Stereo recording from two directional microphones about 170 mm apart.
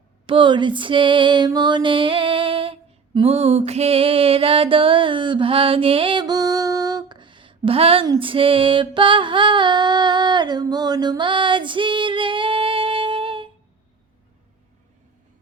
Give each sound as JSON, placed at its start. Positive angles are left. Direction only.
{"t": 0.3, "sound": "female singing", "side_deg": -30}
{"t": 3.2, "sound": "music", "side_deg": -35}